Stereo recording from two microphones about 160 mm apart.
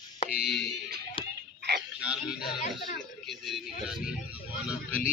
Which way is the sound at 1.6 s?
90° right.